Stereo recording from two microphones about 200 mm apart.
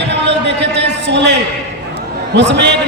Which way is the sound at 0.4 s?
60° right (ahead or behind).